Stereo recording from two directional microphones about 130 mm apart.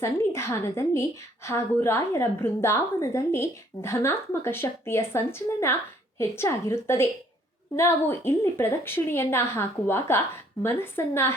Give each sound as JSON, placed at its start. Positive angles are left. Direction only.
{"t": 0.0, "sound": "a woman's voice", "side_deg": 20}